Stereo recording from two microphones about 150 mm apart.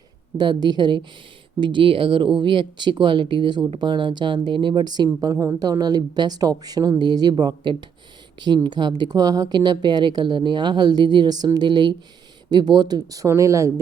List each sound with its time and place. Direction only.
0.3 s speech: 30° right (ahead or behind)